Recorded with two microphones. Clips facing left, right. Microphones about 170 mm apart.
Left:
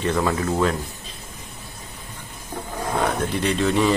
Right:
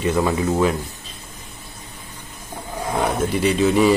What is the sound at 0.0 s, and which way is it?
Speech, 5° right (ahead or behind).